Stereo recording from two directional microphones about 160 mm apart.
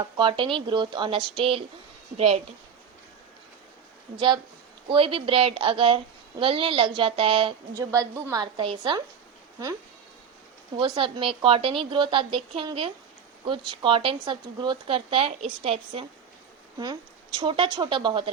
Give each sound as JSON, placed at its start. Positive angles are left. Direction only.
{"t": 0.2, "sound": "a woman's voice", "side_deg": -30}
{"t": 4.9, "sound": "a woman's voice", "side_deg": -35}
{"t": 7.9, "sound": "a woman's voice", "side_deg": -20}
{"t": 10.8, "sound": "a woman's voice", "side_deg": -30}
{"t": 16.7, "sound": "speech", "side_deg": -25}